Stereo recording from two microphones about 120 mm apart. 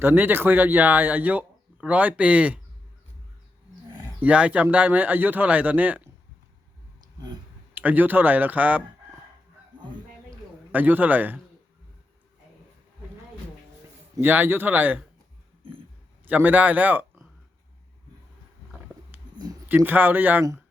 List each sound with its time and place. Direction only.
0.0 s speech: 15° right (ahead or behind)
3.8 s livestock: 25° right (ahead or behind)
4.2 s speech: 10° right (ahead or behind)
7.8 s speech: 15° right (ahead or behind)
10.7 s speech: 15° right (ahead or behind)
14.2 s speech: 15° right (ahead or behind)
16.2 s speech: 15° right (ahead or behind)
19.6 s speech: 15° right (ahead or behind)